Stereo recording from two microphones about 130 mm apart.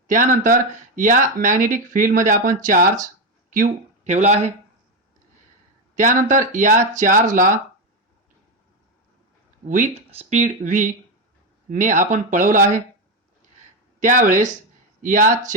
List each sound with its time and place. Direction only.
0.1 s speech: 90° right; by 4.5 s 60° right (ahead or behind)
6.0 s speech: 80° right
9.6 s speech: 70° right (ahead or behind)
14.0 s speech: 85° right